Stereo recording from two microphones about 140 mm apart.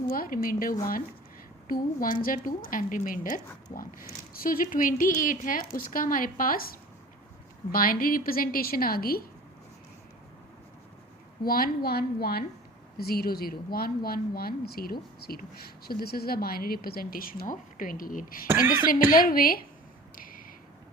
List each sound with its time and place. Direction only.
0.1 s a woman's voice: 90° left
7.7 s a woman's voice: 90° left
11.4 s a woman's voice: 90° left
20.1 s a sound: 90° left